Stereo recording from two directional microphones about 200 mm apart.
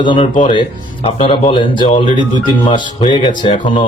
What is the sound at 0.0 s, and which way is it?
Speech, 25° left (ahead or behind).